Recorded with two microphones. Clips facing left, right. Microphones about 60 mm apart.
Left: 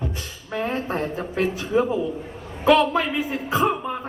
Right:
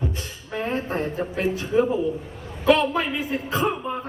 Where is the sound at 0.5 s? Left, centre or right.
Right.